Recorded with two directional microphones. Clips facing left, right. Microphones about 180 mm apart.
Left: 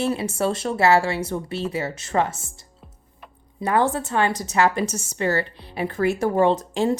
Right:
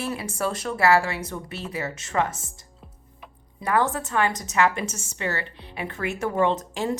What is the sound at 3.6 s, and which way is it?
A woman's voice, 30° left (ahead or behind).